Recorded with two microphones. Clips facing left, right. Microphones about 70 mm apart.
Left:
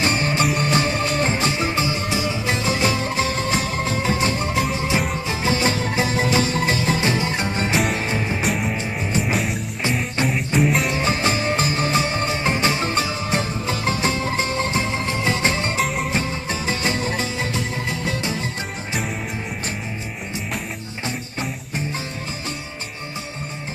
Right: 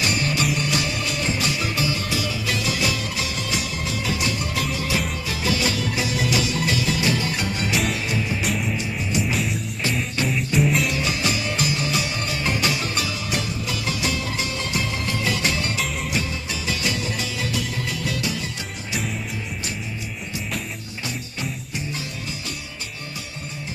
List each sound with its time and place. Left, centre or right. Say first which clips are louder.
0.0 s music: left 3 dB; left
9.3 s music: left 2 dB; centre
10.2 s music: left 3 dB; left
10.6 s music: left 1 dB; centre
10.8 s music: left 3 dB; left